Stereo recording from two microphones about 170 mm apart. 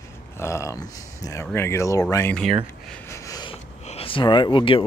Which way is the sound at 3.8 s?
35° left (ahead or behind).